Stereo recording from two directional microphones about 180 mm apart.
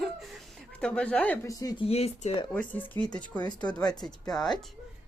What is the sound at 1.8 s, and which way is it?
Speech, 35° left (ahead or behind).